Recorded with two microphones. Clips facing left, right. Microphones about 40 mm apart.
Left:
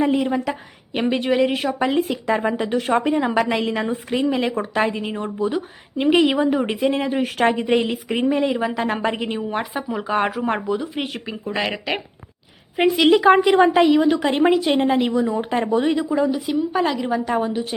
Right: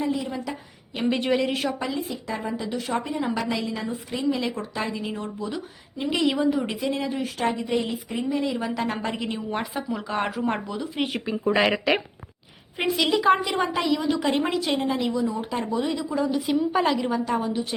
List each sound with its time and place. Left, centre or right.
0.0 s a woman's voice: left
1.0 s a woman's voice: centre
1.9 s a woman's voice: left
3.6 s a woman's voice: left
7.3 s a woman's voice: left
7.8 s speech: left
8.3 s a woman's voice: left
8.5 s a woman's voice: left
11.4 s speech: centre
13.0 s a woman's voice: left
14.8 s a woman's voice: left
16.0 s a woman's voice: left
16.3 s a woman's voice: centre
17.2 s a woman's voice: left